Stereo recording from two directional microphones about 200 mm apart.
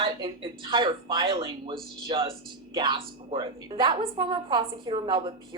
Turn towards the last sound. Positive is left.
turn(degrees=-20)  # may be behind; listen again after turning